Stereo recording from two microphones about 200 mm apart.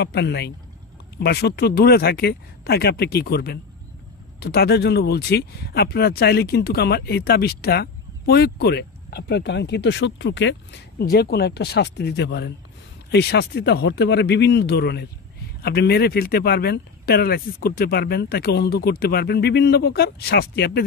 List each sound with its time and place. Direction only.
0.0 s speech: 55° left (ahead or behind)